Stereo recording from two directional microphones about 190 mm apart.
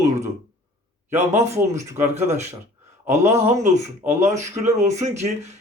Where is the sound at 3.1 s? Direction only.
15° right (ahead or behind).